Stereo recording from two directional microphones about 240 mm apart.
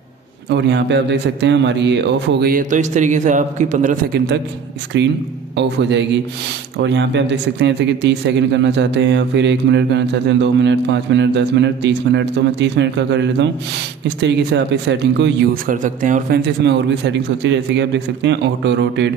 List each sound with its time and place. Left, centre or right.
0.5 s speech: right
4.9 s speech: right
16.6 s speech: right